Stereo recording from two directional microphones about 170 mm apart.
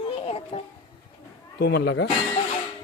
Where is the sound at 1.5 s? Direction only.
75° left (ahead or behind).